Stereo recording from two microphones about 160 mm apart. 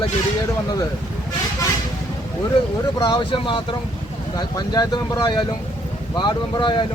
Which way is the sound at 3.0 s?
30° left (ahead or behind).